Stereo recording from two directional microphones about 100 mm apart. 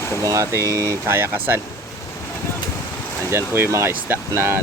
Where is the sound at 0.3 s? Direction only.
30° right (ahead or behind).